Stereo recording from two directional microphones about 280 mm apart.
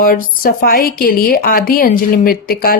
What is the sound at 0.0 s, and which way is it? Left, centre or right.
A woman's voice, left.